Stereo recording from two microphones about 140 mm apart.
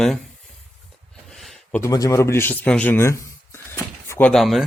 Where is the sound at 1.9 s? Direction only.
25° left (ahead or behind); by 4.6 s centre (ahead or behind).